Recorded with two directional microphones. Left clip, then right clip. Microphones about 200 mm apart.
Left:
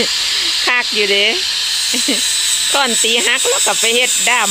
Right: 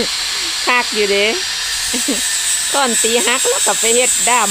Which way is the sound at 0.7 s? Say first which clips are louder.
Right 2 dB; 5° right (ahead or behind).